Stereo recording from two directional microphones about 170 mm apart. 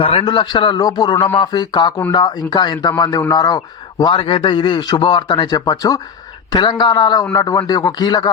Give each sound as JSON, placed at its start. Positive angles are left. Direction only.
{"t": 0.0, "sound": "a man's voice", "side_deg": 30}